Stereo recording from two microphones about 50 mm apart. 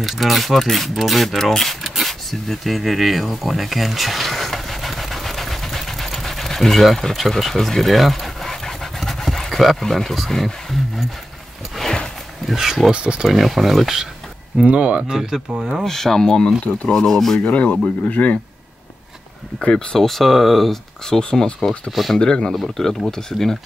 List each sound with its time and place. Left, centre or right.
0.0 s speech: centre
11.7 s a sound: centre
12.4 s speech: centre
12.9 s speech: right
13.3 s speech: centre
14.6 s speech: right
15.5 s speech: centre
15.8 s speech: centre
17.4 s speech: left
19.6 s speech: centre
20.0 s speech: centre
21.1 s speech: centre
21.9 s speech: centre
22.2 s speech: centre